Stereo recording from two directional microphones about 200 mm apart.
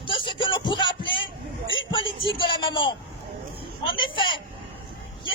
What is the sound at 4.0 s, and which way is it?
Speech, 25° left (ahead or behind).